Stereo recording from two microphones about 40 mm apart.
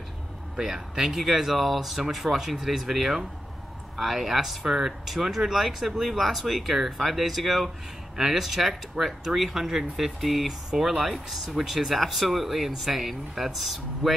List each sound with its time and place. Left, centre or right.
0.6 s speech: centre
10.7 s speech: centre
11.5 s speech: centre